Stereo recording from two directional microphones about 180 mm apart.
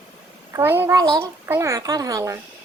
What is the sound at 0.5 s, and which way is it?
Speech, 10° right (ahead or behind).